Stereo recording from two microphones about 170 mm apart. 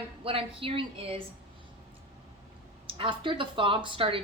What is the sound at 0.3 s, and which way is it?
Speech, 35° right (ahead or behind).